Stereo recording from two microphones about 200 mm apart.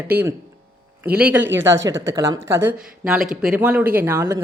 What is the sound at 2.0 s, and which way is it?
Speech, 15° right (ahead or behind).